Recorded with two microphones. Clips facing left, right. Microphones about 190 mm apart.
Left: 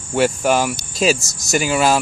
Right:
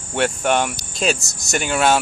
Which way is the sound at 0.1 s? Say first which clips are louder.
Left 3 dB; 5° left (ahead or behind).